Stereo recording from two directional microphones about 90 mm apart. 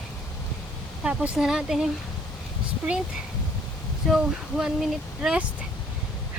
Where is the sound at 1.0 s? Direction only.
10° right (ahead or behind).